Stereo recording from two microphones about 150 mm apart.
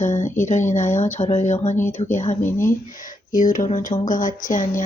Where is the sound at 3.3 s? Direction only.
60° left (ahead or behind).